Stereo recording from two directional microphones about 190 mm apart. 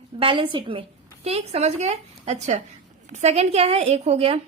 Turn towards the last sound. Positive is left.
turn(degrees=-30)  # may be behind; listen again after turning